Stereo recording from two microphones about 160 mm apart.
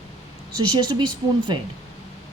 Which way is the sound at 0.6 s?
25° right (ahead or behind).